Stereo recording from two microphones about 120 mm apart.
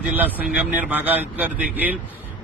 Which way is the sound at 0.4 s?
15° right (ahead or behind).